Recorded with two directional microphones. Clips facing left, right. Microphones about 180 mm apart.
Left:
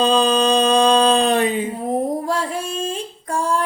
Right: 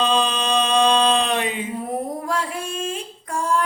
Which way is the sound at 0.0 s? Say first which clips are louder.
Left 5 dB; 40° left (ahead or behind).